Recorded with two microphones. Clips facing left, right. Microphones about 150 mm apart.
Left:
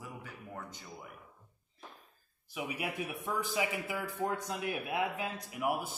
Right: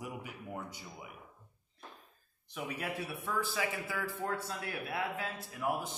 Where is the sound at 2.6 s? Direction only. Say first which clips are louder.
Left 1 dB; 10° left (ahead or behind).